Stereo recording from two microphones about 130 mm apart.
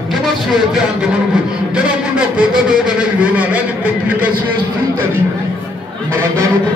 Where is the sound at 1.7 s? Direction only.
10° right (ahead or behind).